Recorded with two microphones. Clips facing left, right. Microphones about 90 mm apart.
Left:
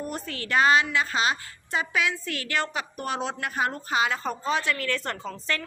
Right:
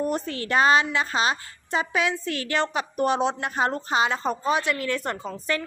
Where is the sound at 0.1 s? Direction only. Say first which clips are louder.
Right 3 dB; 30° right (ahead or behind).